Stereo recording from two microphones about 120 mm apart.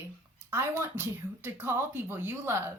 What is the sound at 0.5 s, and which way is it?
A woman's voice, 20° right (ahead or behind).